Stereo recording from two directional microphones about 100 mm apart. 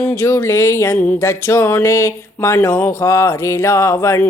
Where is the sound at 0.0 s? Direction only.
25° left (ahead or behind).